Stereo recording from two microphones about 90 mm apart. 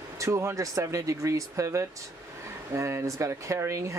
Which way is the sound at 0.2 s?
35° right (ahead or behind).